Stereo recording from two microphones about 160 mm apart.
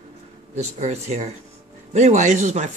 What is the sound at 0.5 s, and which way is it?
Speech, 45° right (ahead or behind).